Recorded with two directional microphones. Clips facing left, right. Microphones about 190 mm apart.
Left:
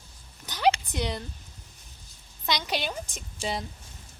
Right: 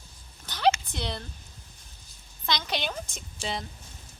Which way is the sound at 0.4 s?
10° left (ahead or behind).